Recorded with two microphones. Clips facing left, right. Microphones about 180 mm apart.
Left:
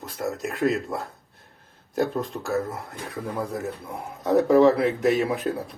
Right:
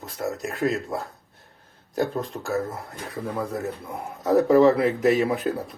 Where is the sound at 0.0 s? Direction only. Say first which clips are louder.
Even; centre (ahead or behind).